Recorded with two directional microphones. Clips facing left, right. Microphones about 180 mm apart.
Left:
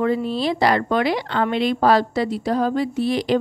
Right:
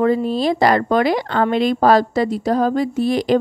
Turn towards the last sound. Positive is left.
turn(degrees=-45)  # may be behind; listen again after turning